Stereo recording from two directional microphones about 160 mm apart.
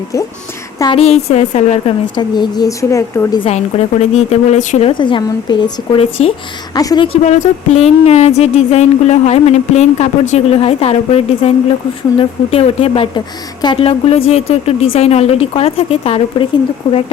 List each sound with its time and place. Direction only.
0.9 s speech: 40° left (ahead or behind)
2.1 s speech: 25° left (ahead or behind)
3.4 s a sound: 40° left (ahead or behind)
4.9 s speech: 30° left (ahead or behind)
6.0 s speech: 40° left (ahead or behind)
6.7 s speech: 25° left (ahead or behind)
7.3 s a sound: 50° left (ahead or behind)
12.1 s speech: 35° left (ahead or behind)